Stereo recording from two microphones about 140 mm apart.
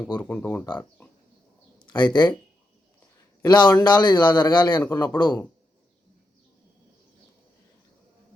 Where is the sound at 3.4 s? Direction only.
30° left (ahead or behind).